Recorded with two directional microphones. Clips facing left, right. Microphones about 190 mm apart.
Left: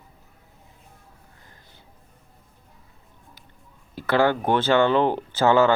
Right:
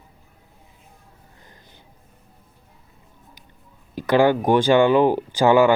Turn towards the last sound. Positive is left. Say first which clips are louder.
# right 3 dB
turn(degrees=-15)  # may be behind; listen again after turning